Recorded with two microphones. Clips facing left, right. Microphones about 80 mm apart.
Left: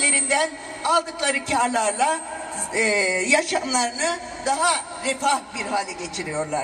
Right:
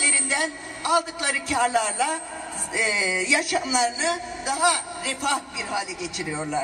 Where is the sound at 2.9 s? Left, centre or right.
Centre.